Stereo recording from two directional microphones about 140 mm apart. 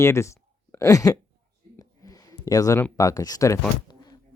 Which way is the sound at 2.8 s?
25° left (ahead or behind).